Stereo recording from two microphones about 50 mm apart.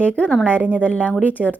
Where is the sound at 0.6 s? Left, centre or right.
Right.